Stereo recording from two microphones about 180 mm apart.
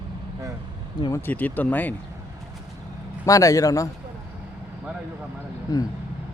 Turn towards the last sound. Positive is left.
turn(degrees=20)  # may be behind; listen again after turning